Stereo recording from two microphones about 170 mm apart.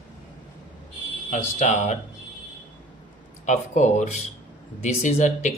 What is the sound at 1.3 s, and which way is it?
Speech, 45° left (ahead or behind).